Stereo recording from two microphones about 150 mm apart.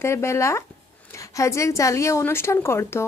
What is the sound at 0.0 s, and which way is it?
A woman's voice, 20° left (ahead or behind).